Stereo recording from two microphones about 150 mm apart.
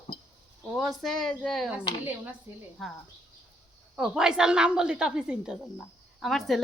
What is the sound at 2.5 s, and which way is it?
Speech, 15° right (ahead or behind).